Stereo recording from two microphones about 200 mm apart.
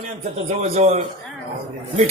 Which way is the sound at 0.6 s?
30° right (ahead or behind).